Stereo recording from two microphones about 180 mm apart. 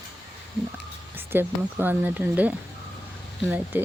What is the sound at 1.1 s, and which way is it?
Speech, 10° right (ahead or behind).